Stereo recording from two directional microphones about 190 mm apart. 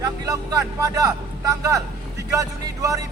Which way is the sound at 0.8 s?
15° right (ahead or behind).